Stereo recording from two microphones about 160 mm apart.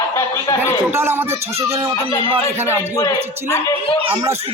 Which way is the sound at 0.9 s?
15° right (ahead or behind).